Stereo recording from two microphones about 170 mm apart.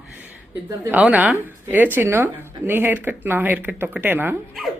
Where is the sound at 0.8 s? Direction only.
5° right (ahead or behind).